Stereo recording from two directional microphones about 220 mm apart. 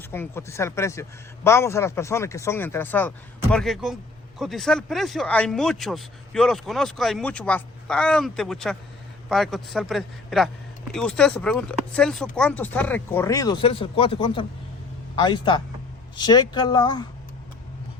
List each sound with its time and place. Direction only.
0.1 s speech: 10° left (ahead or behind)